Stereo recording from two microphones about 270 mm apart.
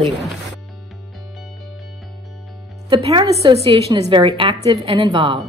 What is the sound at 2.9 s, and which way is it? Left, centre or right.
A woman's voice, centre.